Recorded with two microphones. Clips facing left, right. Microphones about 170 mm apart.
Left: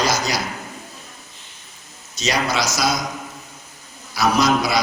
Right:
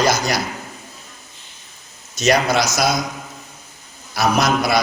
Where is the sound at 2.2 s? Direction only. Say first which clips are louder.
Right 5 dB; 55° right (ahead or behind).